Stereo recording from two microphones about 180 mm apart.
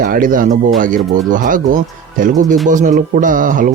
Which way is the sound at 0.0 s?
50° right (ahead or behind).